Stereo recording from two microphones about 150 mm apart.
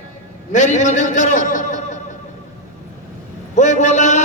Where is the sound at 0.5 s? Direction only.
55° left (ahead or behind).